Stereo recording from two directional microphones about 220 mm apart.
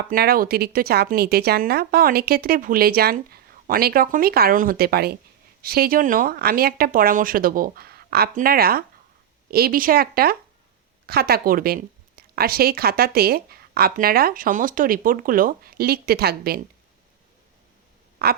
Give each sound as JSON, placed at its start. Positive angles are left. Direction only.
{"t": 0.1, "sound": "a woman's voice", "side_deg": -40}
{"t": 18.2, "sound": "a woman's voice", "side_deg": -45}